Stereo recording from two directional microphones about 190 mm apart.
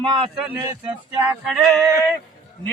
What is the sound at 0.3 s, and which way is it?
Speech, 5° right (ahead or behind).